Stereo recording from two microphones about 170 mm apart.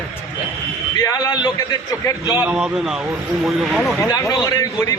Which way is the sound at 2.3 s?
10° right (ahead or behind).